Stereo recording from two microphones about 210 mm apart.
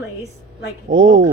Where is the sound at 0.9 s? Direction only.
65° right (ahead or behind).